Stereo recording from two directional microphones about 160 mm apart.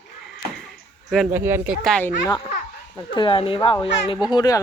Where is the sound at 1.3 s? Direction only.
15° right (ahead or behind).